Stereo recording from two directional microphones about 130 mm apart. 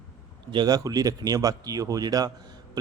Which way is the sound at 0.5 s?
30° right (ahead or behind).